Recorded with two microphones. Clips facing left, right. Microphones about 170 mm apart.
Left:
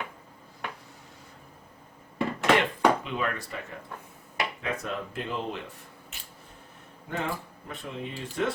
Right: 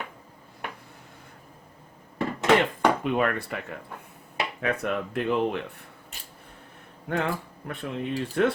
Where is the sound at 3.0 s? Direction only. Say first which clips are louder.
Right 6 dB; 55° right (ahead or behind).